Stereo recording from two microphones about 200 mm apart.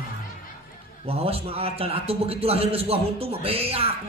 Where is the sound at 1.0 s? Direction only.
30° right (ahead or behind).